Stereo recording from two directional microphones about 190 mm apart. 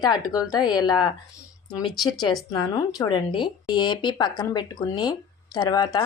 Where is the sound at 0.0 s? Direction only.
20° left (ahead or behind).